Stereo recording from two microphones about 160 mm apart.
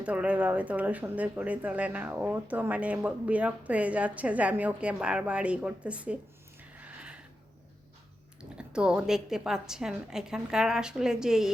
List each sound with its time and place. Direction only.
0.0 s speech: 10° right (ahead or behind)
6.7 s a sound: 10° right (ahead or behind)
8.4 s a woman's voice: 5° right (ahead or behind)